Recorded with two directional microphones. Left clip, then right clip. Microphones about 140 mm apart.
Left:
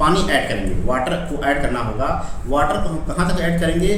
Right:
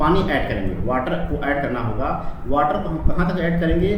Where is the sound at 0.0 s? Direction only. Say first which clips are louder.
Left 2 dB; 15° left (ahead or behind).